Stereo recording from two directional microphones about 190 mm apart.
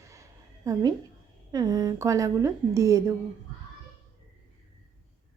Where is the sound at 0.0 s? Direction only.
15° right (ahead or behind).